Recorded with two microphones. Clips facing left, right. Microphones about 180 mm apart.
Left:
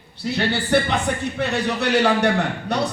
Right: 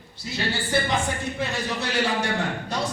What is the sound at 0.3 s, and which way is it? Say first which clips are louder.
A man's voice: left 7 dB; 65° left (ahead or behind).